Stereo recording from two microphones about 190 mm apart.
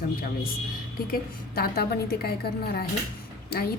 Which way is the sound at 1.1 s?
50° left (ahead or behind).